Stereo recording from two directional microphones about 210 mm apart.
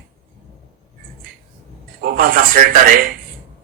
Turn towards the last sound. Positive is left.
turn(degrees=-45)  # may be behind; listen again after turning